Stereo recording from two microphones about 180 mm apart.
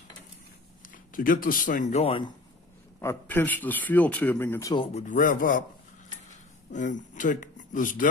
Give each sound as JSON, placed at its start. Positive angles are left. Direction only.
{"t": 0.8, "sound": "speech", "side_deg": 50}
{"t": 3.0, "sound": "a man's voice", "side_deg": 15}
{"t": 5.0, "sound": "speech", "side_deg": 45}
{"t": 6.7, "sound": "speech", "side_deg": 45}